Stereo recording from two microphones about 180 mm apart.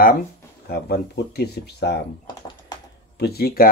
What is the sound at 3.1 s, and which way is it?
Speech, 60° left (ahead or behind).